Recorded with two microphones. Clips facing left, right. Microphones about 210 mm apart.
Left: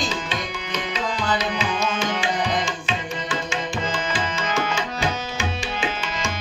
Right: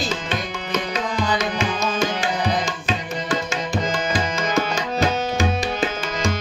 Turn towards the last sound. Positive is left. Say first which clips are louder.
# right 4 dB
turn(degrees=-35)  # may be behind; listen again after turning